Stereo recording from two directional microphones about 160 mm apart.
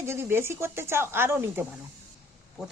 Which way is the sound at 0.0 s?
15° right (ahead or behind).